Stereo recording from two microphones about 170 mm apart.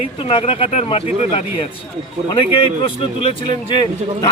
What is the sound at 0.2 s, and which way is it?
Speech, 30° left (ahead or behind).